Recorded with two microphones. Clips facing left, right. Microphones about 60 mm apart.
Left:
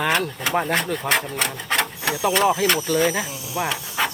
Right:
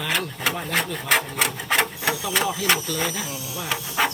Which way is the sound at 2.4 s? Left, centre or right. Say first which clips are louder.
Left 4 dB; left.